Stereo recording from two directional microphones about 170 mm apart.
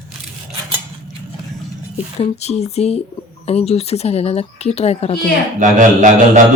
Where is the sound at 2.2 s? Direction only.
40° left (ahead or behind).